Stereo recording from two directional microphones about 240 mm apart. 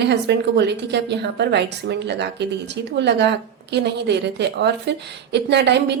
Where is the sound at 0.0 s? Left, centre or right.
Right.